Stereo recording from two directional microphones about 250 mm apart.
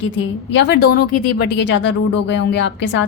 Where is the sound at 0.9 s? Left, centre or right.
Left.